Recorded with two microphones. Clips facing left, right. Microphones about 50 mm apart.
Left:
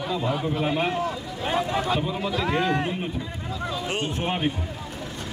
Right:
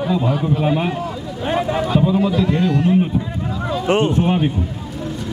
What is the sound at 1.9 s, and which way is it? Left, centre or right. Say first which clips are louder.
Speech: right 9 dB; centre.